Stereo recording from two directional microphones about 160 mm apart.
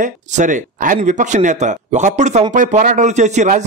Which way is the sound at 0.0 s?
55° right (ahead or behind).